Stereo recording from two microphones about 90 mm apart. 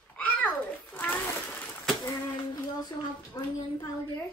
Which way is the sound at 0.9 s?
20° left (ahead or behind).